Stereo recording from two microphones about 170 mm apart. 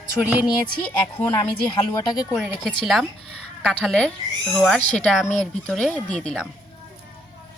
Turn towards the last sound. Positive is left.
turn(degrees=5)  # may be behind; listen again after turning